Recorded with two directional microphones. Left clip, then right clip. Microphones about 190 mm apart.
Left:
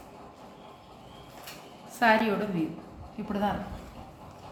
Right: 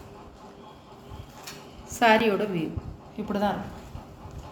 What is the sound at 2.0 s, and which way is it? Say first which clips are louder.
A woman's voice: right 3 dB; 45° right (ahead or behind).